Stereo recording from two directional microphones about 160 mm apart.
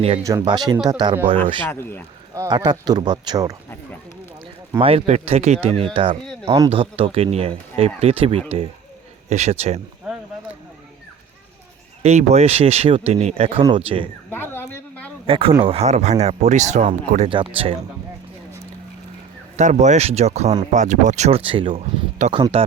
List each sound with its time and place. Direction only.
0.2 s speech: 20° right (ahead or behind)
1.7 s speech: 15° left (ahead or behind)
2.3 s speech: 25° right (ahead or behind)
4.8 s speech: 40° right (ahead or behind)
12.0 s speech: 45° right (ahead or behind)
14.3 s a sound: 15° left (ahead or behind)
15.3 s speech: 35° right (ahead or behind)
17.2 s speech: 35° right (ahead or behind)
19.5 s speech: 45° right (ahead or behind); by 22.6 s 30° right (ahead or behind)